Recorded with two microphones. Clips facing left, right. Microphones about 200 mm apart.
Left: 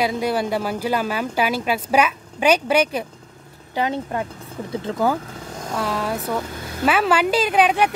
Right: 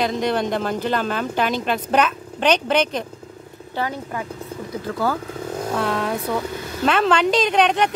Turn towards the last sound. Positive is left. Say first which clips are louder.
# even
turn(degrees=5)  # may be behind; listen again after turning